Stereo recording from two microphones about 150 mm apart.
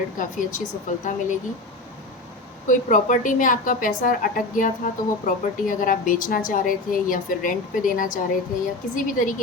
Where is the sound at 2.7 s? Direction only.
60° left (ahead or behind).